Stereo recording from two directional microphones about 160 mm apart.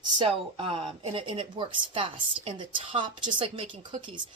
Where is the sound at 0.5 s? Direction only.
35° right (ahead or behind).